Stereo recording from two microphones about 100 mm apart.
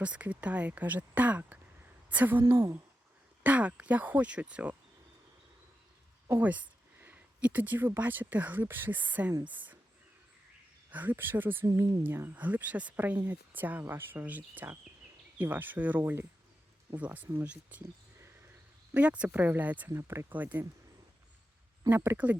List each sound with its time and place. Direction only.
0.0 s speech: 15° right (ahead or behind)
3.4 s speech: 15° right (ahead or behind)
6.4 s speech: 15° right (ahead or behind)
10.9 s speech: 20° right (ahead or behind)
11.6 s speech: 35° right (ahead or behind)
12.0 s speech: 20° right (ahead or behind)
18.9 s speech: 15° right (ahead or behind)
19.9 s speech: 30° right (ahead or behind)
21.8 s speech: 20° right (ahead or behind)